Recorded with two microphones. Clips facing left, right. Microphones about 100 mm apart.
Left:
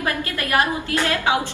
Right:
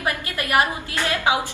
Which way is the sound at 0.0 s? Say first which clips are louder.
Left 1 dB; 20° right (ahead or behind).